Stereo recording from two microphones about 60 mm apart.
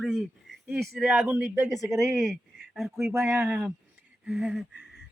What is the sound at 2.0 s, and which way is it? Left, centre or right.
A man's voice, centre.